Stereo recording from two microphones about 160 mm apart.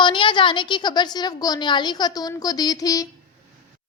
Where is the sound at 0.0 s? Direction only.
30° left (ahead or behind).